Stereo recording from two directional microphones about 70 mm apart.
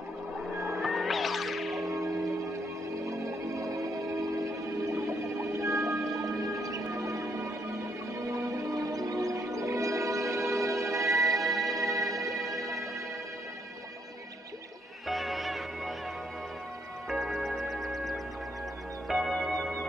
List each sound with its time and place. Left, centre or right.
0.7 s music: centre
3.1 s music: right
4.9 s music: right
8.3 s music: right
11.1 s music: centre
15.0 s music: centre
17.1 s music: centre